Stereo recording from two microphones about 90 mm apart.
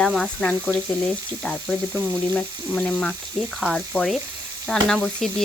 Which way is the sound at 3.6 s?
5° left (ahead or behind).